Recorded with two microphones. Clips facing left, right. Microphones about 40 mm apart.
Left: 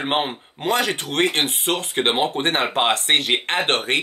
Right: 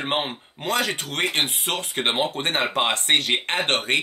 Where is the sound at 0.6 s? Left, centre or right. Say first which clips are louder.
Left 3 dB; left.